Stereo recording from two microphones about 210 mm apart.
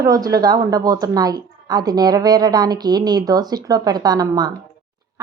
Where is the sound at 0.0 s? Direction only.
15° right (ahead or behind).